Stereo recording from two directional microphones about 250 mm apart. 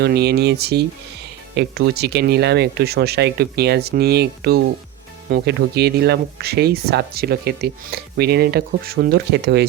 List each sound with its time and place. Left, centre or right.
0.0 s speech: right